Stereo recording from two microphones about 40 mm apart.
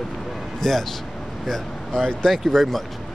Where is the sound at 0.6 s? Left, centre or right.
Centre.